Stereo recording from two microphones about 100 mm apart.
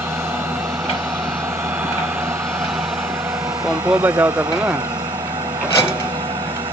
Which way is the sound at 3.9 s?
15° right (ahead or behind).